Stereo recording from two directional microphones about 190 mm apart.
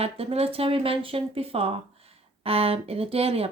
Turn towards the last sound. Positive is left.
turn(degrees=-30)  # may be behind; listen again after turning